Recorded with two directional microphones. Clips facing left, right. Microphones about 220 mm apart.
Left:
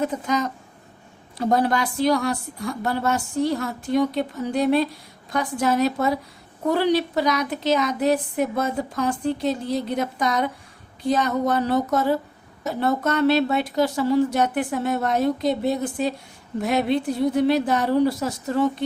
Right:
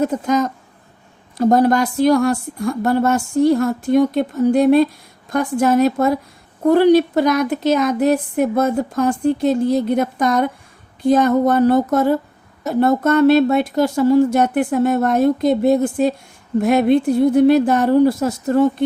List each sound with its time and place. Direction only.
0.0 s a woman's voice: 45° right (ahead or behind)